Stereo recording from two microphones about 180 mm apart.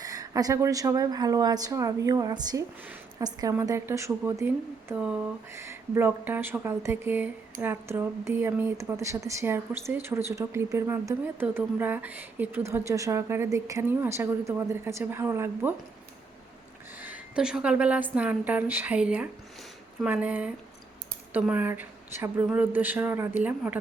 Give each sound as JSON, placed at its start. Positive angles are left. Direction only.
{"t": 0.0, "sound": "a woman's voice", "side_deg": -20}
{"t": 2.8, "sound": "a sound", "side_deg": -10}
{"t": 3.2, "sound": "a woman's voice", "side_deg": -20}
{"t": 17.0, "sound": "a woman's voice", "side_deg": -5}